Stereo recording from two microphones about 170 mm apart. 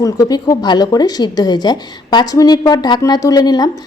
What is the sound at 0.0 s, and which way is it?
A woman's voice, 20° left (ahead or behind).